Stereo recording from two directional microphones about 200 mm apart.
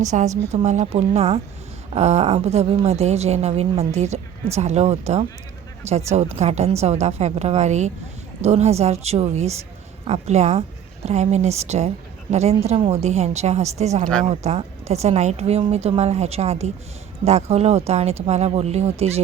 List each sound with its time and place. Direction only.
0.0 s a woman's voice: 35° right (ahead or behind)